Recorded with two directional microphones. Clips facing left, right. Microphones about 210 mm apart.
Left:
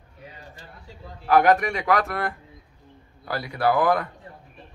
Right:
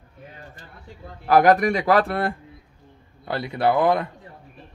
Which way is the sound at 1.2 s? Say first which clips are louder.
Right 2 dB; 35° right (ahead or behind).